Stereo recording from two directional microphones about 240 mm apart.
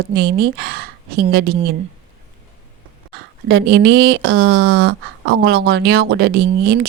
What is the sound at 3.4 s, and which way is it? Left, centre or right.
Speech, right.